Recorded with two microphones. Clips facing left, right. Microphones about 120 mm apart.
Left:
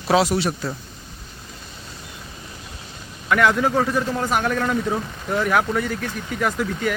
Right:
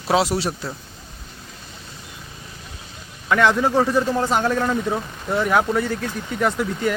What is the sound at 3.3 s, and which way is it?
Speech, 25° right (ahead or behind).